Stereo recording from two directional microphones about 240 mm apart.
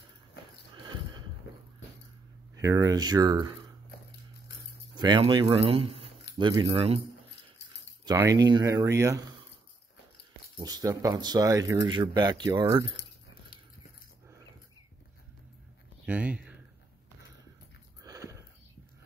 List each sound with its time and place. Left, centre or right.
2.6 s speech: centre
4.9 s speech: centre
8.0 s speech: centre
10.6 s speech: centre
16.1 s speech: centre
18.0 s a sound: centre